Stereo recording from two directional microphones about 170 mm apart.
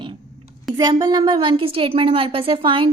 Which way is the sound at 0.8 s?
25° right (ahead or behind).